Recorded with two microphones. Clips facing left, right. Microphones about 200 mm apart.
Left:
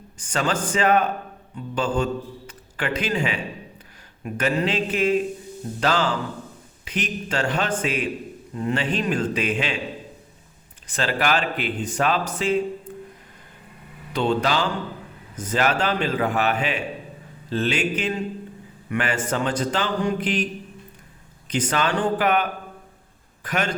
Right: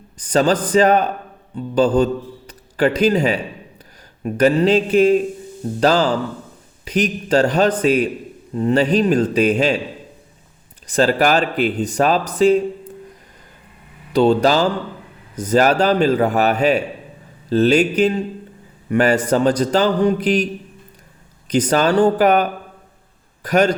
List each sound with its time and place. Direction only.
0.3 s speech: 35° right (ahead or behind)
10.8 s speech: 40° right (ahead or behind)
14.1 s a man's voice: 40° right (ahead or behind)